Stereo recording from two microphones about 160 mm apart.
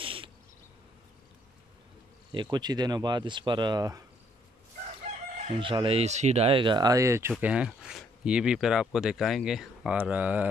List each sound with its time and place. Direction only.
0.0 s insect: 35° right (ahead or behind)
2.3 s speech: 25° right (ahead or behind)
5.1 s chicken: 45° right (ahead or behind)
5.6 s speech: 35° right (ahead or behind); by 10.5 s 10° right (ahead or behind)